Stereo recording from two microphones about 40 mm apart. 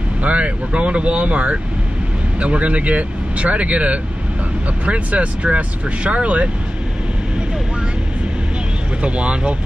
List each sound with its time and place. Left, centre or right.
0.2 s speech: right
9.0 s speech: right